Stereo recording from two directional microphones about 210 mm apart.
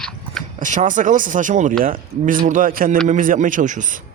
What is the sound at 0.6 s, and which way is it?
Speech, 35° right (ahead or behind).